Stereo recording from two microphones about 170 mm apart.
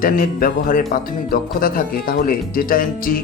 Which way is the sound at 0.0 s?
55° left (ahead or behind).